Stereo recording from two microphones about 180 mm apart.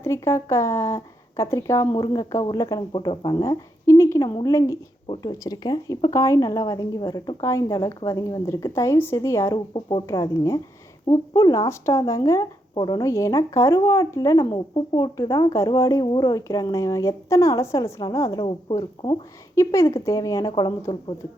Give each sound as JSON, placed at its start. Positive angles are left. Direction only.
{"t": 0.0, "sound": "a woman's voice", "side_deg": 15}
{"t": 5.0, "sound": "a woman's voice", "side_deg": 30}